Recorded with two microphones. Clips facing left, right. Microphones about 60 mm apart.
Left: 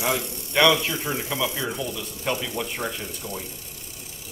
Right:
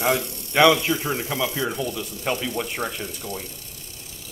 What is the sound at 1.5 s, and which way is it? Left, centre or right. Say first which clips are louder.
Speech: right 3 dB; centre.